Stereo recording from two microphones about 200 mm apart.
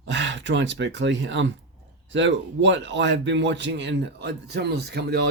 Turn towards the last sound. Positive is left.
turn(degrees=-55)  # may be behind; listen again after turning